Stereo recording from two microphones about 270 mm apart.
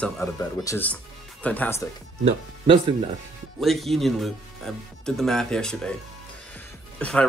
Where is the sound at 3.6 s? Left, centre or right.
Centre.